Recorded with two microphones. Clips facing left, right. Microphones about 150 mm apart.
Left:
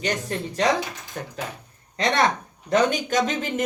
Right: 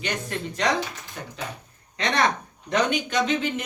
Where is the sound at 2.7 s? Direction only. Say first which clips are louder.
Left 3 dB; 45° left (ahead or behind).